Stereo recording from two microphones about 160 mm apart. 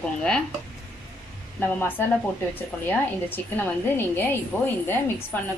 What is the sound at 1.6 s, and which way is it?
A woman's voice, 10° left (ahead or behind).